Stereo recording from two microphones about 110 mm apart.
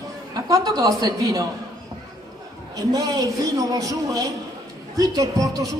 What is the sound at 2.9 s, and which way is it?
A woman's voice, 35° right (ahead or behind).